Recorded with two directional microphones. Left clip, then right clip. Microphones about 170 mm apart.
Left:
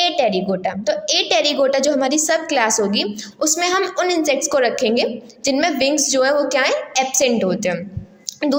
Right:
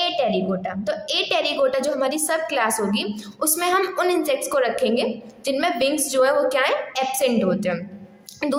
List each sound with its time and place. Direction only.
0.0 s a woman's voice: 25° left (ahead or behind)